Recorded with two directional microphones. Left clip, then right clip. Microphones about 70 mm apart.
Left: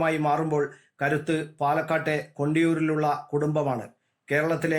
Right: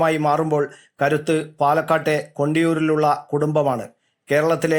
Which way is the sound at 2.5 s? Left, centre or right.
Right.